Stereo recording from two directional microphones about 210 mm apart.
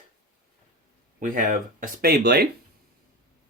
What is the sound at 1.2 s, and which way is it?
Speech, 40° right (ahead or behind).